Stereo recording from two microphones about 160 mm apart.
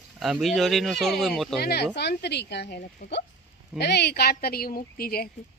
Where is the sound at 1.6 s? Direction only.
80° left.